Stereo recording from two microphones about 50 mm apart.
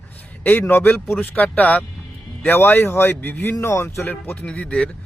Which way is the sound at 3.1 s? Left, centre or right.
Left.